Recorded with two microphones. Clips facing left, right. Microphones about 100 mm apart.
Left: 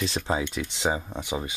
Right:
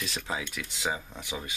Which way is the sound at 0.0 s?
30° left (ahead or behind).